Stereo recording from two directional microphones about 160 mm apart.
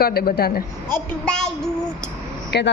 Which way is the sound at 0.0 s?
70° left (ahead or behind).